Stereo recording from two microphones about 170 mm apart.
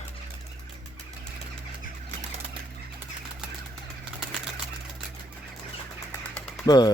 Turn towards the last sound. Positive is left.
turn(degrees=25)  # may be behind; listen again after turning